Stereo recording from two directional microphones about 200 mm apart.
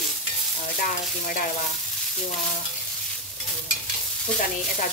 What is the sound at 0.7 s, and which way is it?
Speech, 40° left (ahead or behind).